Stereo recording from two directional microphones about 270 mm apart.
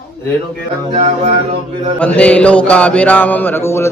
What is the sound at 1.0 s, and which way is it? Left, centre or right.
Music, right.